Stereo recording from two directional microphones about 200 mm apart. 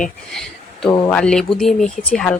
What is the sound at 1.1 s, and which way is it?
Speech, 5° left (ahead or behind).